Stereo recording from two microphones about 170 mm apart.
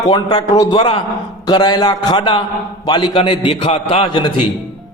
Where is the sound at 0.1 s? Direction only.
25° left (ahead or behind).